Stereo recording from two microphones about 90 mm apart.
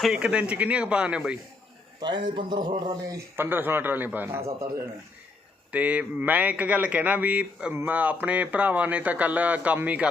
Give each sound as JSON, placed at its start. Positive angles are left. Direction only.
{"t": 0.0, "sound": "speech", "side_deg": -5}
{"t": 2.0, "sound": "speech", "side_deg": -60}
{"t": 3.3, "sound": "a man's voice", "side_deg": -25}
{"t": 5.7, "sound": "speech", "side_deg": -15}